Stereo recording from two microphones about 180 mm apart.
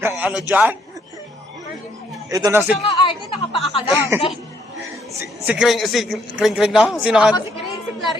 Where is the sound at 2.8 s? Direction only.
30° left (ahead or behind).